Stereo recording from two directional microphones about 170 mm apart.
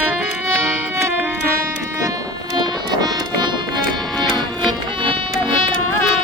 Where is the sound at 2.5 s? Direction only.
25° right (ahead or behind).